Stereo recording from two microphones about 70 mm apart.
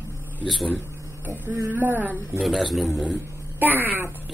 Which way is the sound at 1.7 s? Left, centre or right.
Right.